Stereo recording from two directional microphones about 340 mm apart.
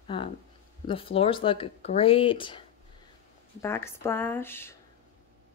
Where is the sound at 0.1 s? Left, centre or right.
Centre.